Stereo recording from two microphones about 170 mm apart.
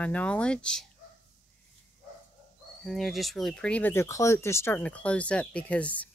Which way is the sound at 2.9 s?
Centre (ahead or behind).